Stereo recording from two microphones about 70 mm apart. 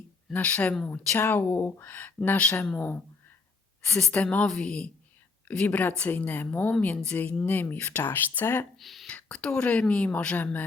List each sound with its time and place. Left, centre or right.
0.3 s speech: left
3.8 s a woman's voice: centre
8.8 s speech: centre
9.0 s a woman's voice: centre